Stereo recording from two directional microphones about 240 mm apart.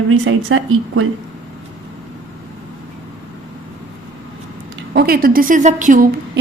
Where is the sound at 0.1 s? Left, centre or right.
Right.